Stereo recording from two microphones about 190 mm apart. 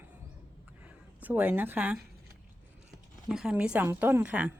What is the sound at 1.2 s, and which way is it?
Speech, 10° right (ahead or behind).